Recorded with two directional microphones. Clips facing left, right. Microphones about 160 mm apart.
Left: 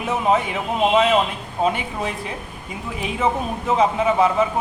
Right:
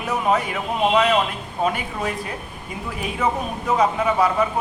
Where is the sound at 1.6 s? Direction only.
25° left (ahead or behind).